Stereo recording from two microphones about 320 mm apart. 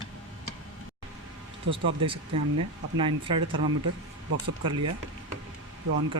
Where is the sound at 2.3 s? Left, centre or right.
Right.